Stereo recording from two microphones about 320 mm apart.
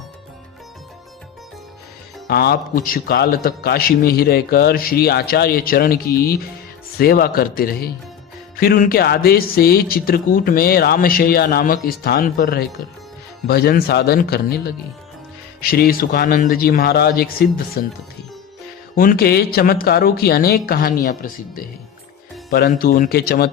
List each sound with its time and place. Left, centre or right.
2.2 s speech: left
15.7 s speech: left
18.9 s speech: left